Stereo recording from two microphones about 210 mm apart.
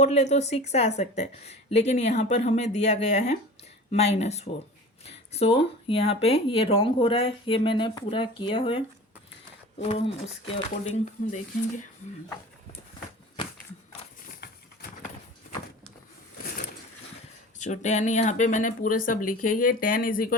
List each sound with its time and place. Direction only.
0.0 s speech: 30° left (ahead or behind)
14.3 s a sound: 45° left (ahead or behind)
17.6 s speech: 35° left (ahead or behind)